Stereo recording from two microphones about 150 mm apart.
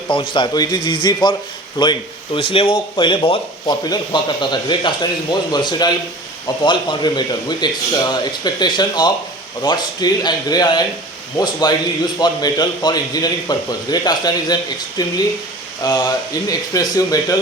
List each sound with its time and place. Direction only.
0.1 s a man's voice: 35° left (ahead or behind)